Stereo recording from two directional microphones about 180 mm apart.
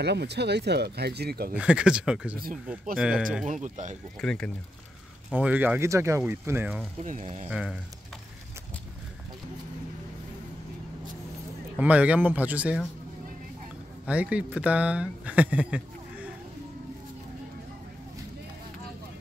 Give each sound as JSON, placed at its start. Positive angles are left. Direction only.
{"t": 0.0, "sound": "speech", "side_deg": -70}
{"t": 1.5, "sound": "speech", "side_deg": -5}
{"t": 3.4, "sound": "speech", "side_deg": -45}
{"t": 4.2, "sound": "speech", "side_deg": 5}
{"t": 5.3, "sound": "speech", "side_deg": -10}
{"t": 7.0, "sound": "speech", "side_deg": -40}
{"t": 11.8, "sound": "speech", "side_deg": -10}
{"t": 14.0, "sound": "speech", "side_deg": -5}